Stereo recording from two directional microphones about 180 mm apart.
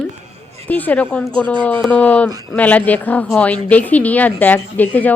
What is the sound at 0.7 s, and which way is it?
A woman's voice, 10° left (ahead or behind).